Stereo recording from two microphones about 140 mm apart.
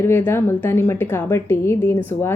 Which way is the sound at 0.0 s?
15° left (ahead or behind).